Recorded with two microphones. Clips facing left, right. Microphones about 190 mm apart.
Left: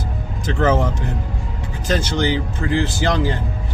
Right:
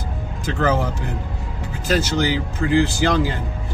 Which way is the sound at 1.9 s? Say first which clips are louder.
Even; 10° right (ahead or behind).